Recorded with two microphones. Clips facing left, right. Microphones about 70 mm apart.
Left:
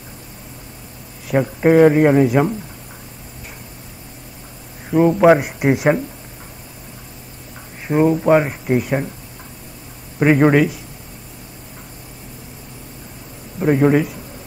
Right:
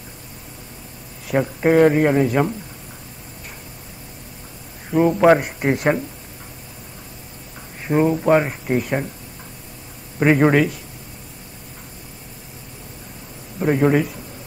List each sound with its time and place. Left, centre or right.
1.2 s speech: centre
4.9 s speech: centre
7.8 s speech: centre
10.1 s speech: centre
13.6 s a man's voice: centre